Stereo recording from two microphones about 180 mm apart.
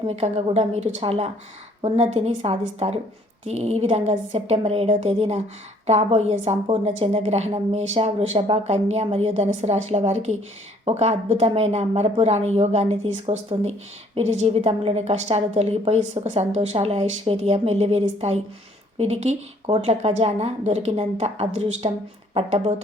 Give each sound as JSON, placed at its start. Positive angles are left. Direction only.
{"t": 0.1, "sound": "a woman's voice", "side_deg": -35}